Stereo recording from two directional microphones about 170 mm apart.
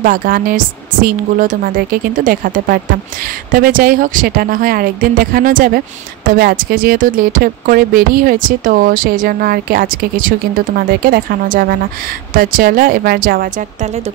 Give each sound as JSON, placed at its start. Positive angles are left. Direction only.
{"t": 0.0, "sound": "speech", "side_deg": -55}